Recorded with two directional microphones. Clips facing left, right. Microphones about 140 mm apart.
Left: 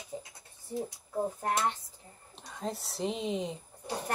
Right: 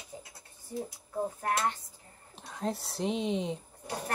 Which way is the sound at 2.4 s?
Centre (ahead or behind).